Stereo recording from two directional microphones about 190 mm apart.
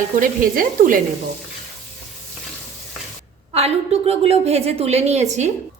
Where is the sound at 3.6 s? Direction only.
35° right (ahead or behind).